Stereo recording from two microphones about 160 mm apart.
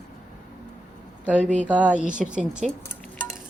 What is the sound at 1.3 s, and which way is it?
Speech, 10° right (ahead or behind).